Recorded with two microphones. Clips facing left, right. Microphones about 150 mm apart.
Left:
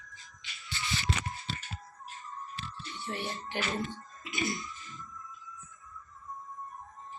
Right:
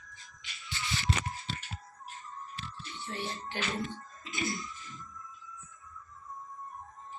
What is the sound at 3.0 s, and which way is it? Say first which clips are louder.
Speech: left 1 dB; 15° left (ahead or behind).